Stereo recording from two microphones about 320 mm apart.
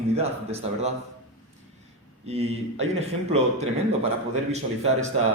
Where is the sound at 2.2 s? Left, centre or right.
Centre.